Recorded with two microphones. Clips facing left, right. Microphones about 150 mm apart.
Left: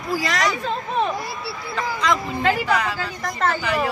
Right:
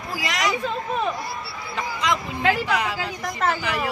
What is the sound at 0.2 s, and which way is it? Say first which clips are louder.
Speech: right 2 dB; 15° right (ahead or behind).